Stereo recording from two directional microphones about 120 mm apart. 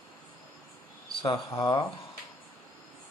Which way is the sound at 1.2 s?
35° left (ahead or behind).